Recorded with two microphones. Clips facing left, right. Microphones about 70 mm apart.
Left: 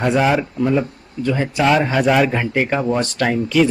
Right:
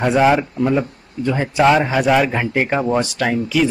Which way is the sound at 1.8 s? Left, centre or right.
Centre.